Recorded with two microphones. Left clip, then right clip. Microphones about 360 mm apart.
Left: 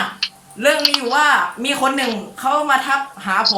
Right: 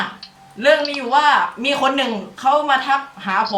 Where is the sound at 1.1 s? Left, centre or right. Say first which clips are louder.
Right 4 dB; centre.